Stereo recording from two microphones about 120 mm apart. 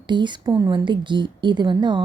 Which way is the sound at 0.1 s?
40° right (ahead or behind).